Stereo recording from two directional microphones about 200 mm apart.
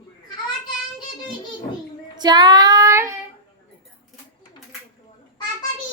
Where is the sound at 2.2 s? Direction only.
20° right (ahead or behind).